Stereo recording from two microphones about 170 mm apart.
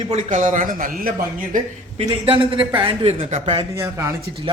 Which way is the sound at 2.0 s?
30° right (ahead or behind).